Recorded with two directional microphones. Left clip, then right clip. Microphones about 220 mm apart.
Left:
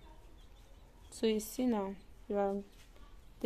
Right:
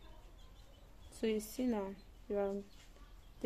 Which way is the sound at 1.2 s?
20° left (ahead or behind).